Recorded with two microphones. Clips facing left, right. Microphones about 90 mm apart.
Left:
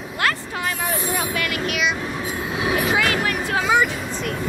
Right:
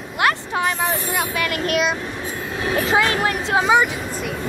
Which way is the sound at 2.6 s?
15° left (ahead or behind).